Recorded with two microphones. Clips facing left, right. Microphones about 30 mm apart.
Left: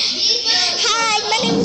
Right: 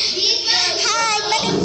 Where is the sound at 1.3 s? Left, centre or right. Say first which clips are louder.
Left 2 dB; left.